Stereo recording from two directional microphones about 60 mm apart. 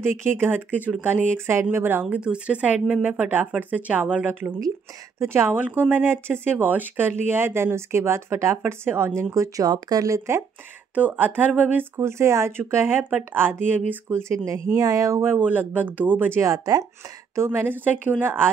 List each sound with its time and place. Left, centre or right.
0.0 s speech: right
1.0 s speech: right
2.0 s speech: centre; by 10.3 s right
11.0 s speech: right
12.0 s speech: right
14.3 s speech: right
15.4 s speech: right
16.3 s speech: right
17.4 s speech: right